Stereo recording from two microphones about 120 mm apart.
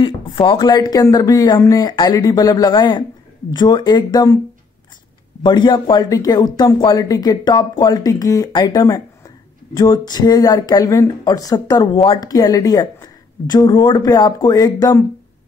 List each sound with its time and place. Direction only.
0.0 s speech: 45° left (ahead or behind)
5.4 s speech: 40° left (ahead or behind)